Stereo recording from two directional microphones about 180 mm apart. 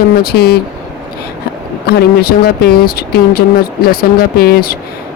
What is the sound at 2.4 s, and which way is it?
Speech, 60° left (ahead or behind).